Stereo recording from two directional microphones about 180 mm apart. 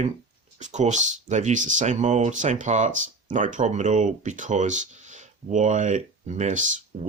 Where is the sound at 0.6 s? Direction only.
40° right (ahead or behind).